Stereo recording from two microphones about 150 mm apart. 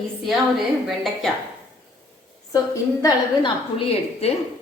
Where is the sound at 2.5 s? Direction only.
25° left (ahead or behind).